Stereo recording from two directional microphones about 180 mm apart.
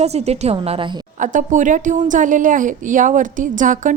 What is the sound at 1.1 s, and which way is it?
A woman's voice, 45° right (ahead or behind).